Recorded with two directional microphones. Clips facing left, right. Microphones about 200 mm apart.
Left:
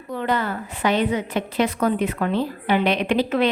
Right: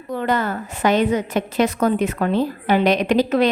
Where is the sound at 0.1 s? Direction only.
45° right (ahead or behind).